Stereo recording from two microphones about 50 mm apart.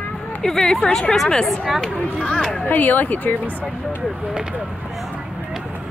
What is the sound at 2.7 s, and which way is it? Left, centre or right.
Speech, left.